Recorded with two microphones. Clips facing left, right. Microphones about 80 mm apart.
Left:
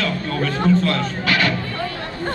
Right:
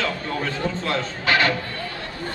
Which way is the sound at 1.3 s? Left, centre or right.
Right.